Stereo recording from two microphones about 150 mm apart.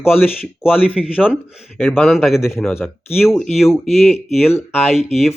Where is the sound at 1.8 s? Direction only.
15° left (ahead or behind).